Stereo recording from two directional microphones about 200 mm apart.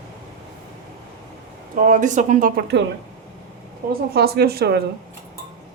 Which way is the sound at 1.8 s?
40° right (ahead or behind).